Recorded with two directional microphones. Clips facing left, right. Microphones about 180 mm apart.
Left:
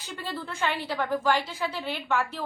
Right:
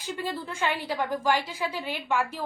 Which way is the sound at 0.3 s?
10° right (ahead or behind).